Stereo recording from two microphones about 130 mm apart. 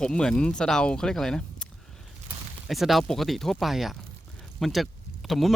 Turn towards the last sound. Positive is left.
turn(degrees=0)  # may be behind; listen again after turning